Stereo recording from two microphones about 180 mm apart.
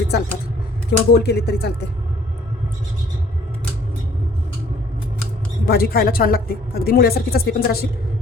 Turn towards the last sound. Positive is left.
turn(degrees=60)  # may be behind; listen again after turning